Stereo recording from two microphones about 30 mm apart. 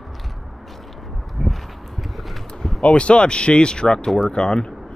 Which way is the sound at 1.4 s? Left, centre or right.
Centre.